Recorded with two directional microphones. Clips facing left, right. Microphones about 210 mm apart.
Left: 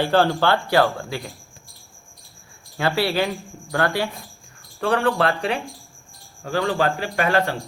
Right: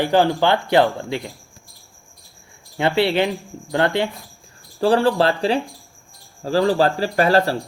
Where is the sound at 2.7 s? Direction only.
20° right (ahead or behind).